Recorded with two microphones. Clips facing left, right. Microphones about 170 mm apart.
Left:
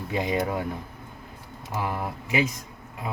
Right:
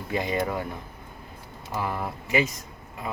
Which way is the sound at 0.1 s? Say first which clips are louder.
Left 1 dB; 15° left (ahead or behind).